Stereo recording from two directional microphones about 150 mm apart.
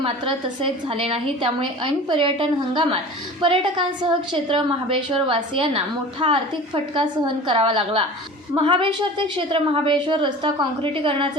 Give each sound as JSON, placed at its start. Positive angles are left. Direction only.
{"t": 0.0, "sound": "a woman's voice", "side_deg": -35}